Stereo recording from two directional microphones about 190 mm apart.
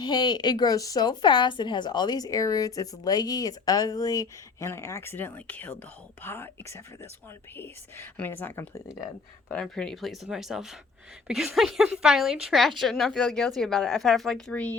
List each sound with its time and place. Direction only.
0.0 s a woman's voice: 20° left (ahead or behind); by 14.7 s 5° left (ahead or behind)